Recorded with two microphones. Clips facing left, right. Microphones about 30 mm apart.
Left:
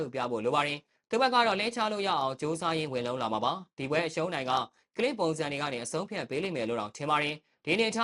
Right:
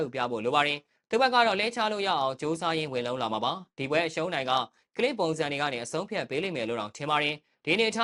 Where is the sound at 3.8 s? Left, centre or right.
Right.